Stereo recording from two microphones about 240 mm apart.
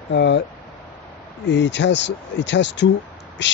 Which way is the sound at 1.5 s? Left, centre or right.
Left.